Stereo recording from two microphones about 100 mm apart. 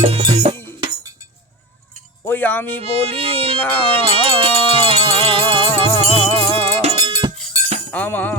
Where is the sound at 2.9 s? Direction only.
70° right (ahead or behind).